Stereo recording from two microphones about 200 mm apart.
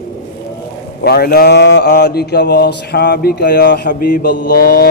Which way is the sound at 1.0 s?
50° left (ahead or behind).